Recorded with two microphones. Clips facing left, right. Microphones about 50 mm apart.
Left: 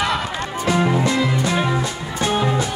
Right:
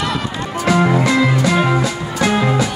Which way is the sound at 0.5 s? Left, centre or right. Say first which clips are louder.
Right 4 dB; right.